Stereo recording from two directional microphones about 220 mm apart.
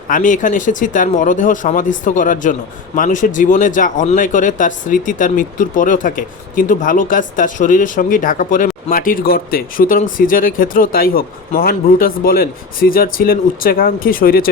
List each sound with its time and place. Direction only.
0.1 s speech: 35° left (ahead or behind)